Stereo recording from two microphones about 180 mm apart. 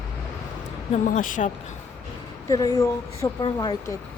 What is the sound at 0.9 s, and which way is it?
Speech, 45° left (ahead or behind).